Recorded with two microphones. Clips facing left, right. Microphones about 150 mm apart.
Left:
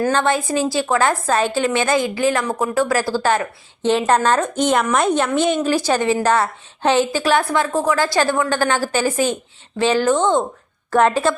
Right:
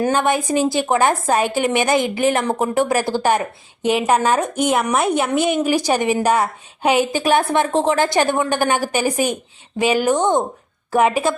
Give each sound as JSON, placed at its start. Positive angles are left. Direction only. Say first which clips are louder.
{"t": 0.0, "sound": "a woman's voice", "louder": "even", "side_deg": -15}